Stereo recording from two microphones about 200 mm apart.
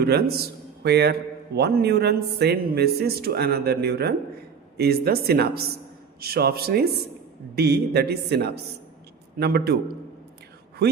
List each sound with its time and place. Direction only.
0.0 s a man's voice: 50° right (ahead or behind)